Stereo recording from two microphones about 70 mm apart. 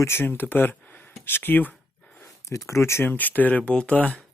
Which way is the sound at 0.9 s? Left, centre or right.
Left.